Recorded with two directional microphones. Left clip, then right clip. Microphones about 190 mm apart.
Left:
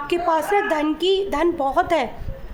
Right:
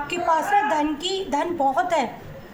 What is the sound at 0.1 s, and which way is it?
A woman's voice, 50° left (ahead or behind).